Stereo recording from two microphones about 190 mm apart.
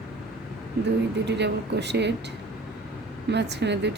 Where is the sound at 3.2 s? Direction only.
65° right (ahead or behind).